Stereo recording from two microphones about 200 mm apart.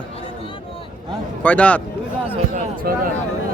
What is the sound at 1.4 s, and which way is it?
Speech, 10° left (ahead or behind).